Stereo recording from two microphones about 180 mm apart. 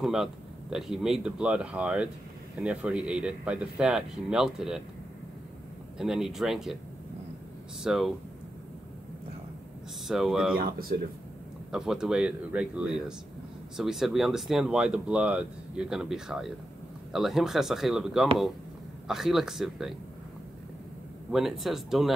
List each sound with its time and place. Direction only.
0.0 s speech: centre (ahead or behind)
5.9 s speech: centre (ahead or behind)
7.8 s speech: centre (ahead or behind)
10.0 s speech: centre (ahead or behind)
10.6 s speech: 55° right (ahead or behind)
11.7 s speech: 5° right (ahead or behind)
21.3 s speech: centre (ahead or behind)